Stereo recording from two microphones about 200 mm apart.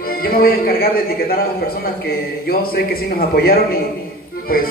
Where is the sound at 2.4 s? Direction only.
50° left (ahead or behind).